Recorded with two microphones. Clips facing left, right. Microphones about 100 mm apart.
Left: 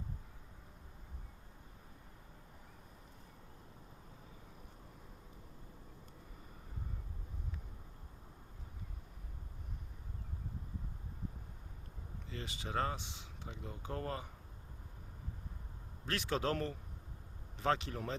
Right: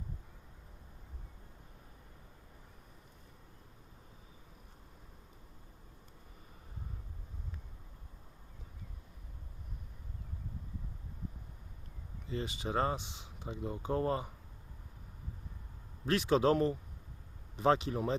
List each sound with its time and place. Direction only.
12.3 s speech: 20° right (ahead or behind)
16.0 s speech: 20° right (ahead or behind)